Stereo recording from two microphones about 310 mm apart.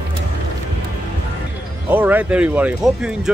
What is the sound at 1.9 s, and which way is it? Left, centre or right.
Speech, centre.